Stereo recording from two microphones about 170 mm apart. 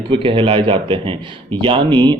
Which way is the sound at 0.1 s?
30° right (ahead or behind).